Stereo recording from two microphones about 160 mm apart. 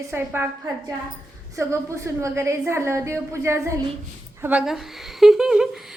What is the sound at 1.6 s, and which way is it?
A woman's voice, 20° right (ahead or behind).